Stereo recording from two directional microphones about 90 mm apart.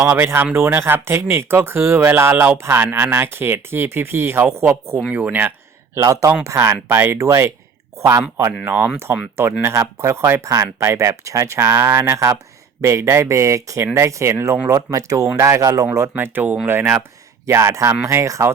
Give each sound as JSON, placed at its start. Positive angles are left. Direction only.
{"t": 0.0, "sound": "speech", "side_deg": -20}
{"t": 5.1, "sound": "a sound", "side_deg": -20}
{"t": 6.0, "sound": "speech", "side_deg": -35}
{"t": 8.6, "sound": "speech", "side_deg": -20}
{"t": 14.7, "sound": "speech", "side_deg": -40}
{"t": 16.0, "sound": "speech", "side_deg": -25}